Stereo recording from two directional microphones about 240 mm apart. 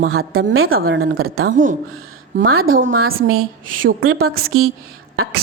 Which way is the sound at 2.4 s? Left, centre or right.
Right.